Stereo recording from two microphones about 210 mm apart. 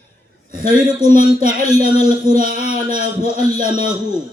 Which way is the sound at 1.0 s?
40° right (ahead or behind).